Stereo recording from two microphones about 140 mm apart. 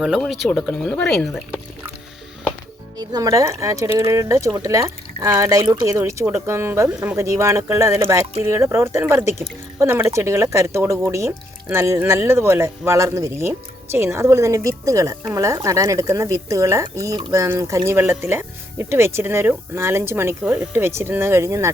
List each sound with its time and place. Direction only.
0.0 s speech: centre (ahead or behind)
3.0 s speech: 25° right (ahead or behind)